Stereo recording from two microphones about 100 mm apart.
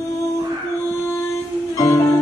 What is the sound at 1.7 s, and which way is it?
Music, 35° left (ahead or behind).